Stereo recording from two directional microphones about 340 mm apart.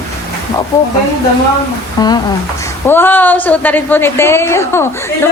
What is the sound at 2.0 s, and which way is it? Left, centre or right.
A woman's voice, centre.